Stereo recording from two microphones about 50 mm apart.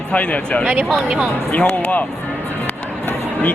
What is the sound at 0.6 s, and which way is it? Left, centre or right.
Speech, right.